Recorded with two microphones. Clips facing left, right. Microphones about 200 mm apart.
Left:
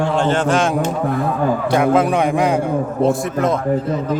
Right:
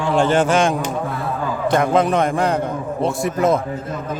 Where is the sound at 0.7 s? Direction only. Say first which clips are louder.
Left 4 dB; 55° left (ahead or behind).